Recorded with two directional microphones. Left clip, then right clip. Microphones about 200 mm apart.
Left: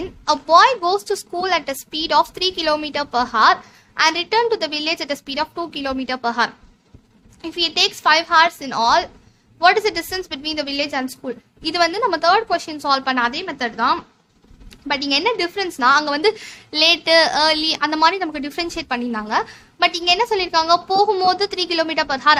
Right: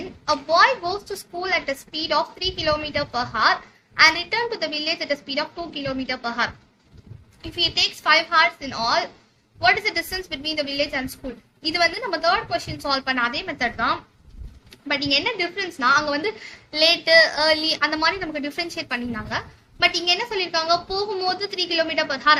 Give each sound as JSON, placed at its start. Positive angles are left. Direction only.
{"t": 0.3, "sound": "a woman's voice", "side_deg": 50}